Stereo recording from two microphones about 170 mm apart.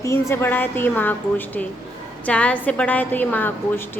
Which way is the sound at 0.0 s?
15° left (ahead or behind).